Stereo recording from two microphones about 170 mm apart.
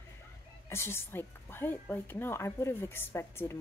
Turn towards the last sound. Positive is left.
turn(degrees=15)  # may be behind; listen again after turning